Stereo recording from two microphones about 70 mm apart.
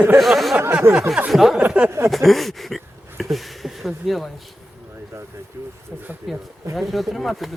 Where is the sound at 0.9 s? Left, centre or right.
Right.